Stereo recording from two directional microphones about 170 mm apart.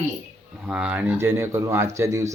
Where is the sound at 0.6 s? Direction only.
5° right (ahead or behind).